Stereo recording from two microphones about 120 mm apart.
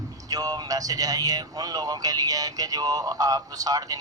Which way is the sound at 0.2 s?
30° right (ahead or behind).